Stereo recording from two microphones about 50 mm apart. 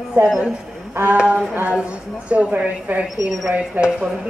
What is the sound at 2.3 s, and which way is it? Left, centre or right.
Speech, right.